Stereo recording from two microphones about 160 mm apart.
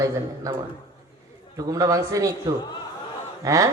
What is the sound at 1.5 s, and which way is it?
Speech, 25° right (ahead or behind).